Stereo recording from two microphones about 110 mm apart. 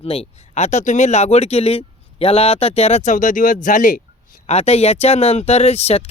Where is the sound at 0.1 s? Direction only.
75° left (ahead or behind).